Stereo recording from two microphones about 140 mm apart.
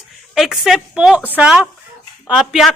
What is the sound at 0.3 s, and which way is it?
Speech, centre (ahead or behind).